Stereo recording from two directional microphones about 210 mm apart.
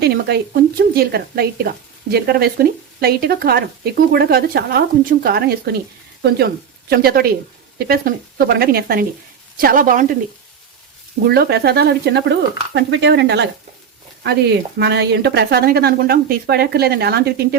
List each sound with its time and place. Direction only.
0.0 s a woman's voice: 50° right (ahead or behind)
11.3 s speech: 50° right (ahead or behind)
14.8 s a woman's voice: 55° right (ahead or behind)